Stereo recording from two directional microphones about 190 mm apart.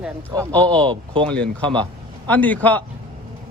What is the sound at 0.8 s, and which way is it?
Speech, 25° right (ahead or behind).